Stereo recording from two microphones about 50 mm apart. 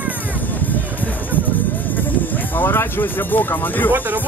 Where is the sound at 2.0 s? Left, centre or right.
Left.